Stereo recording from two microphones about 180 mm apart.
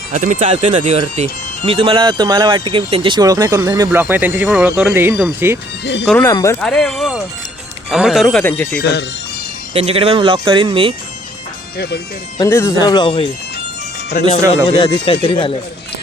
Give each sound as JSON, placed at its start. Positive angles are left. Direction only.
{"t": 0.1, "sound": "speech", "side_deg": -45}
{"t": 5.8, "sound": "speech", "side_deg": 80}
{"t": 6.1, "sound": "speech", "side_deg": 10}
{"t": 6.6, "sound": "speech", "side_deg": 5}
{"t": 8.8, "sound": "speech", "side_deg": 70}
{"t": 9.7, "sound": "speech", "side_deg": -35}
{"t": 12.4, "sound": "speech", "side_deg": 15}
{"t": 14.1, "sound": "speech", "side_deg": 45}
{"t": 15.0, "sound": "speech", "side_deg": 30}